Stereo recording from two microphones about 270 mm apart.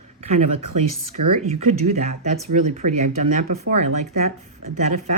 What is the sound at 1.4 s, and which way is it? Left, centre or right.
Speech, right.